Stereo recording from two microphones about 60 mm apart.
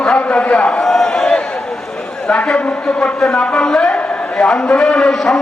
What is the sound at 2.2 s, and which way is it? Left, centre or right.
A man's voice, centre.